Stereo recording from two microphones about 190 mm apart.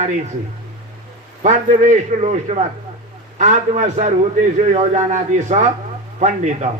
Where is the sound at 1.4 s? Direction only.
40° right (ahead or behind).